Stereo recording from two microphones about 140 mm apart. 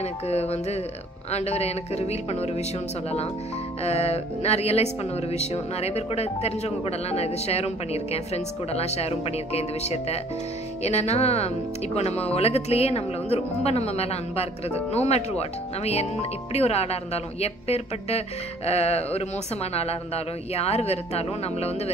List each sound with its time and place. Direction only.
0.0 s speech: 50° left (ahead or behind)
3.8 s speech: 50° left (ahead or behind)